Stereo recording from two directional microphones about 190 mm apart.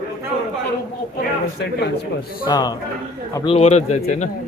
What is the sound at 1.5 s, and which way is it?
Speech, 65° left (ahead or behind).